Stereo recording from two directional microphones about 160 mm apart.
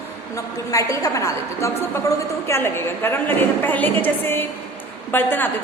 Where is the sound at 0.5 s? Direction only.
20° left (ahead or behind).